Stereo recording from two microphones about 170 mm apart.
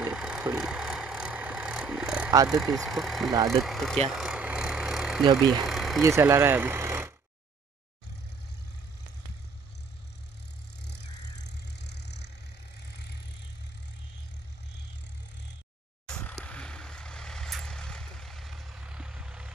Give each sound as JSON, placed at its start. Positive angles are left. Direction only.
{"t": 0.0, "sound": "vehicle", "side_deg": -5}
{"t": 2.5, "sound": "speech", "side_deg": 0}
{"t": 4.1, "sound": "vehicle", "side_deg": -5}
{"t": 5.4, "sound": "speech", "side_deg": 0}
{"t": 6.0, "sound": "speech", "side_deg": -15}
{"t": 11.4, "sound": "vehicle", "side_deg": 85}
{"t": 16.1, "sound": "a sound", "side_deg": 5}
{"t": 16.4, "sound": "vehicle", "side_deg": 5}